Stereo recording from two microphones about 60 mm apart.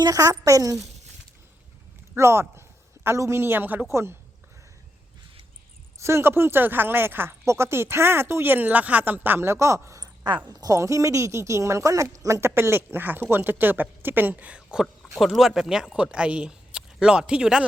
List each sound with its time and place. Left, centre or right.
0.0 s a woman's voice: right
2.1 s a sound: right
3.2 s speech: right
3.8 s a woman's voice: right
6.0 s speech: right
7.4 s speech: right
9.5 s speech: right
10.5 s a woman's voice: right
10.8 s speech: right
12.4 s speech: right; by 17.7 s centre